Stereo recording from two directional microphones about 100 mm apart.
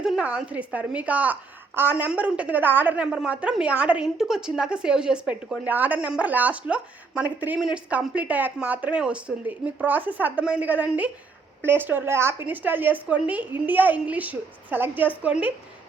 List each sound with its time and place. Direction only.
0.0 s a woman's voice: 10° right (ahead or behind)